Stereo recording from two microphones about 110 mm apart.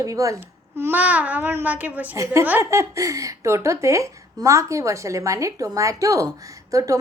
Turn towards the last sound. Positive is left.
turn(degrees=-30)  # may be behind; listen again after turning